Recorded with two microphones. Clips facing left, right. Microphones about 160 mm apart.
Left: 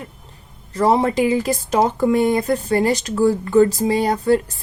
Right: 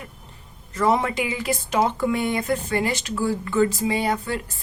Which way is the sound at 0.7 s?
35° left (ahead or behind).